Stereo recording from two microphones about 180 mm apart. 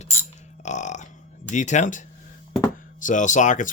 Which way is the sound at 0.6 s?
40° left (ahead or behind).